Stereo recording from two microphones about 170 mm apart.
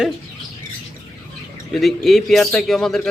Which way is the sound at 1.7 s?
Centre (ahead or behind).